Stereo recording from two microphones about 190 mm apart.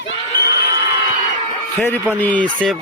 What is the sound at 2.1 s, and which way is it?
Speech, 10° left (ahead or behind).